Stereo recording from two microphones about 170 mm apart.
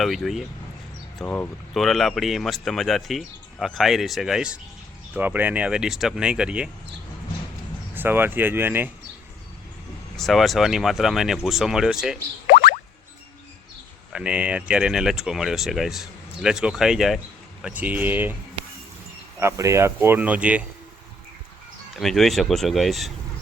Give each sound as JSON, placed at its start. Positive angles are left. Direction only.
{"t": 0.0, "sound": "speech", "side_deg": 0}
{"t": 7.9, "sound": "speech", "side_deg": -10}
{"t": 10.2, "sound": "speech", "side_deg": 0}
{"t": 12.5, "sound": "boing", "side_deg": 60}
{"t": 14.1, "sound": "speech", "side_deg": -5}
{"t": 19.4, "sound": "speech", "side_deg": -15}
{"t": 21.9, "sound": "speech", "side_deg": 0}